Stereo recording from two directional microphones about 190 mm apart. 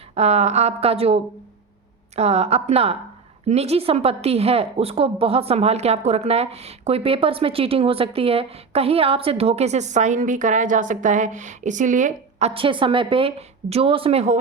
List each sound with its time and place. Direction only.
0.1 s a woman's voice: 35° right (ahead or behind)